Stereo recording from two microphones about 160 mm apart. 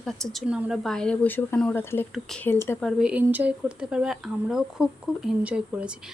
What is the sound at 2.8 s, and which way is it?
Speech, 5° right (ahead or behind).